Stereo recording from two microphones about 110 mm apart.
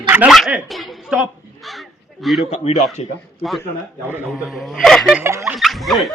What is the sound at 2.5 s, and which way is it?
Speech, 75° left (ahead or behind).